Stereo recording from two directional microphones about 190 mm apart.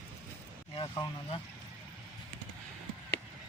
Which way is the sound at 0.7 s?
25° left (ahead or behind).